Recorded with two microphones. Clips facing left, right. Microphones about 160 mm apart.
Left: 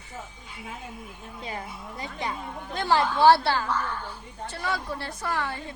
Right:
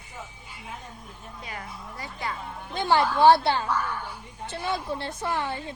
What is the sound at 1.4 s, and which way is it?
Speech, 25° left (ahead or behind).